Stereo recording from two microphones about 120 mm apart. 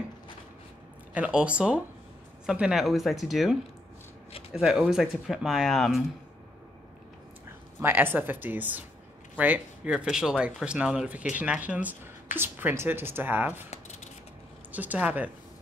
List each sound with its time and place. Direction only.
1.1 s speech: 10° right (ahead or behind)
4.6 s speech: 5° right (ahead or behind)
7.8 s speech: 15° right (ahead or behind)
14.7 s speech: 15° right (ahead or behind)